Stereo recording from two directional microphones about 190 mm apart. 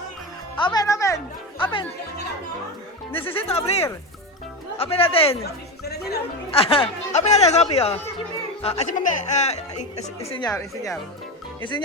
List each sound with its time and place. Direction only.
0.6 s music: 20° left (ahead or behind)
3.3 s speech: 30° left (ahead or behind)
5.4 s speech: 55° left (ahead or behind)
6.5 s speech: 30° left (ahead or behind)
10.5 s speech: 15° left (ahead or behind)